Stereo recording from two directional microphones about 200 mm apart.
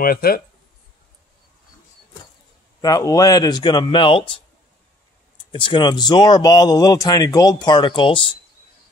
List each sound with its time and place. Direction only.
0.0 s speech: 50° left (ahead or behind)
2.8 s speech: 20° left (ahead or behind)
5.5 s speech: 25° left (ahead or behind)